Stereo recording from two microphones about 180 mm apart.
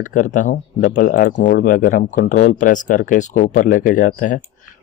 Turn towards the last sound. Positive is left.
turn(degrees=45)  # may be behind; listen again after turning